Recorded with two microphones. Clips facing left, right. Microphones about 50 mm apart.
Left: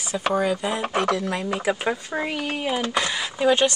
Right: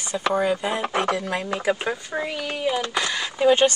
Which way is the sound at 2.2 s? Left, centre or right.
Left.